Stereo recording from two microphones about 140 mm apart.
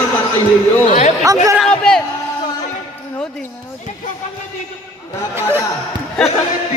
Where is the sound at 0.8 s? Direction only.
55° left (ahead or behind).